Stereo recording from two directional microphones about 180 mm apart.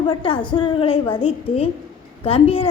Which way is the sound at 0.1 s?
30° left (ahead or behind).